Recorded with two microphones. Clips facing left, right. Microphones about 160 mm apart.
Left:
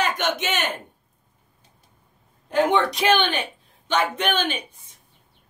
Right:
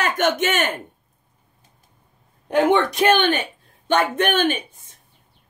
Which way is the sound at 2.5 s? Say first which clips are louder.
Right 3 dB; 55° right (ahead or behind).